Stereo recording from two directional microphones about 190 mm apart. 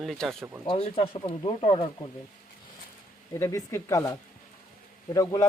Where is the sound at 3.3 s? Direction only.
15° left (ahead or behind).